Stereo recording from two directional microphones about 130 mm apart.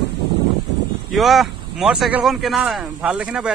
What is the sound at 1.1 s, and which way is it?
Speech, centre (ahead or behind).